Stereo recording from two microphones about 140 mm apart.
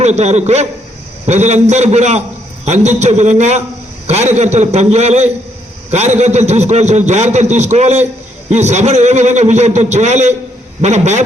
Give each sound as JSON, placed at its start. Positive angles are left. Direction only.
{"t": 0.0, "sound": "a man's voice", "side_deg": -50}